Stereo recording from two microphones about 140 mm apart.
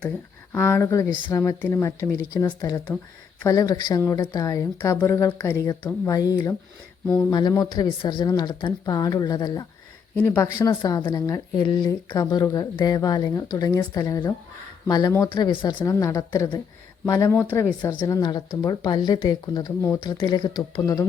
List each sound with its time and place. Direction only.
0.5 s a woman's voice: 20° left (ahead or behind)
7.3 s a woman's voice: 30° left (ahead or behind)
10.2 s speech: 15° left (ahead or behind)
10.7 s a woman's voice: 30° left (ahead or behind)
18.0 s a woman's voice: 25° left (ahead or behind)